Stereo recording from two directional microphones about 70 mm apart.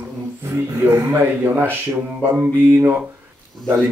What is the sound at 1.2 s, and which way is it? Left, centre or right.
Speech, right.